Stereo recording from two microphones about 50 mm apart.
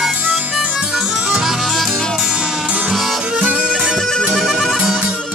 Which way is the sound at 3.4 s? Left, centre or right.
Right.